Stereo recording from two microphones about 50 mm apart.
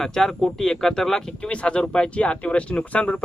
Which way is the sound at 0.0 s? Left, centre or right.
Centre.